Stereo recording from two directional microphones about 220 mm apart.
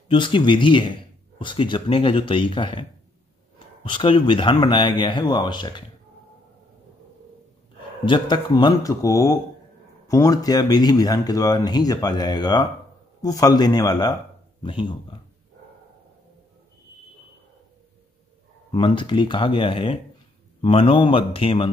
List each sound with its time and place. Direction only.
0.1 s speech: 20° left (ahead or behind)
8.0 s speech: 20° left (ahead or behind)
18.7 s speech: 20° left (ahead or behind)